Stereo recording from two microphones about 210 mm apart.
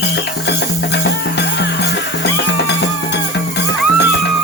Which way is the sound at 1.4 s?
55° left (ahead or behind).